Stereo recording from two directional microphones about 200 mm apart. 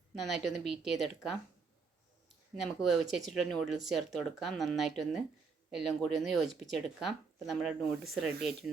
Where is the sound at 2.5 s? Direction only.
Centre (ahead or behind).